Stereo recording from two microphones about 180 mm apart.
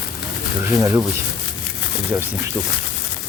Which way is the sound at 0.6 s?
15° right (ahead or behind).